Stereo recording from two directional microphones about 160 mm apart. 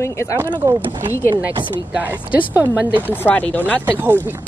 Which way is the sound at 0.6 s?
15° right (ahead or behind).